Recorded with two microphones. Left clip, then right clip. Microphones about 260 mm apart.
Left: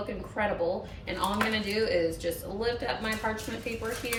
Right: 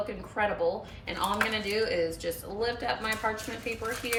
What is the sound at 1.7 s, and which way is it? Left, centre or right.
A woman's voice, centre.